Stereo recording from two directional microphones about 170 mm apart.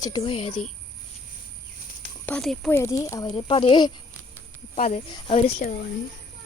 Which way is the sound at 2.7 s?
15° left (ahead or behind).